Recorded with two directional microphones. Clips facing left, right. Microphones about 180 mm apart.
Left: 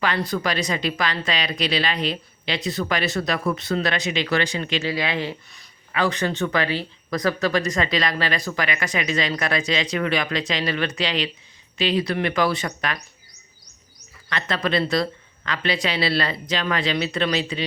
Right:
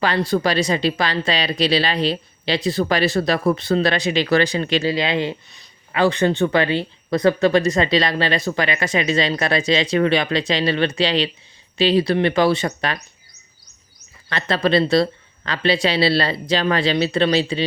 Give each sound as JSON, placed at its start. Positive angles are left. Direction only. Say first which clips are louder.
{"t": 0.0, "sound": "speech", "louder": "right 5 dB", "side_deg": -30}
{"t": 14.3, "sound": "speech", "louder": "right 5 dB", "side_deg": -30}